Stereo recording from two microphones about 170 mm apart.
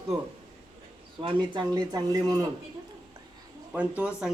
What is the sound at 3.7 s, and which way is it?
Speech, 5° right (ahead or behind).